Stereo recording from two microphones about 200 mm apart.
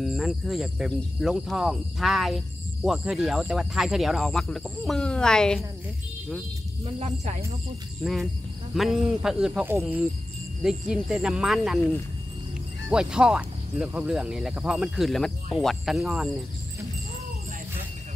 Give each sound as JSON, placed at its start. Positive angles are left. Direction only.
{"t": 0.0, "sound": "speech", "side_deg": 0}
{"t": 7.0, "sound": "speech", "side_deg": -30}
{"t": 8.0, "sound": "speech", "side_deg": 0}
{"t": 12.9, "sound": "speech", "side_deg": -5}